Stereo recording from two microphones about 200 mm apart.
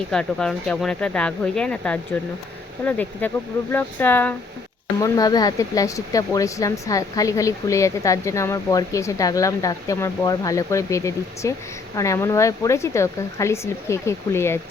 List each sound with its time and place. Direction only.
0.1 s speech: 5° left (ahead or behind)